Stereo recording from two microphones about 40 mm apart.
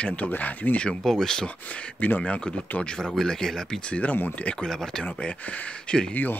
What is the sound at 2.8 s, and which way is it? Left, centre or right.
Speech, left.